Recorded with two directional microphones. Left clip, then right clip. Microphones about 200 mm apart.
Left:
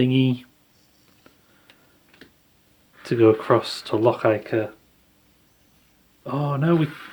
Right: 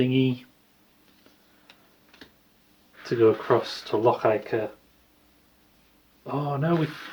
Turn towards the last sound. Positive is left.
turn(degrees=55)  # may be behind; listen again after turning